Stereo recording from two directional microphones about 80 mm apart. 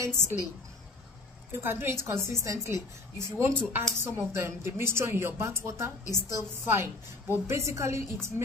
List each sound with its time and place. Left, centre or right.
0.0 s speech: right
1.5 s a woman's voice: right